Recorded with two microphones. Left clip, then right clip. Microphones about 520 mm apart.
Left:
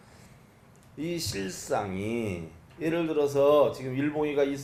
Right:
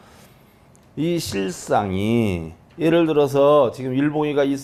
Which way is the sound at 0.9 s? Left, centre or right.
Right.